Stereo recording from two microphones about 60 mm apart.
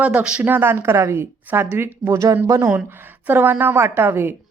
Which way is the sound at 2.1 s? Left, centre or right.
Right.